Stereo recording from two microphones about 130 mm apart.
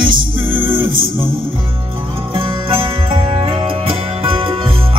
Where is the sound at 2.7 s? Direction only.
40° right (ahead or behind).